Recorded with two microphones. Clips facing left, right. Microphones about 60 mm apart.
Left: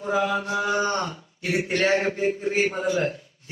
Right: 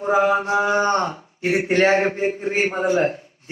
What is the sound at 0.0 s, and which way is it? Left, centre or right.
Speech, right.